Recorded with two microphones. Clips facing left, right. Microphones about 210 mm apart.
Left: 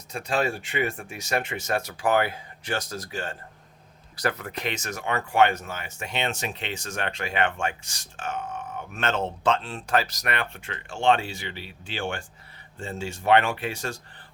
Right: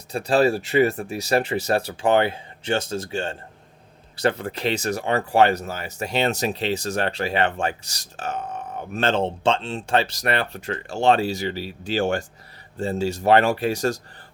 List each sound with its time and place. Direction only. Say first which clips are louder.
0.1 s speech: right 8 dB; 35° right (ahead or behind)